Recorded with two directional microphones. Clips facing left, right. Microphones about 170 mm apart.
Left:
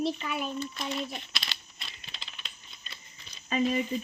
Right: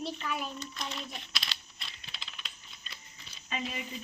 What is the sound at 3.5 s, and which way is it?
Child singing, 40° left (ahead or behind).